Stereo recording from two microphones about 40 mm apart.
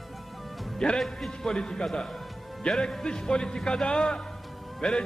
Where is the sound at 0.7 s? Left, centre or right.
Centre.